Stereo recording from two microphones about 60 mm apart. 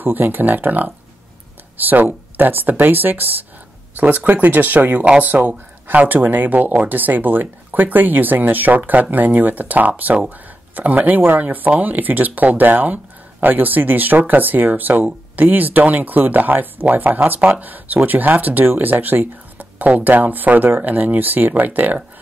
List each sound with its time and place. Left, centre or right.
0.0 s speech: right